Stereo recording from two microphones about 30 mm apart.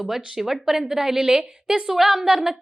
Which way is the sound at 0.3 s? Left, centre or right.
Centre.